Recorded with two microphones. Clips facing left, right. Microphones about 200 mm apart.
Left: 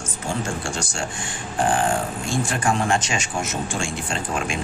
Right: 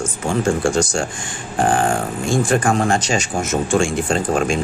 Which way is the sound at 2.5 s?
45° right (ahead or behind).